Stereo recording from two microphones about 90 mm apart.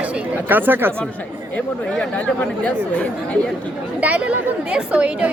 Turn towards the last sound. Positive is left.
turn(degrees=-15)  # may be behind; listen again after turning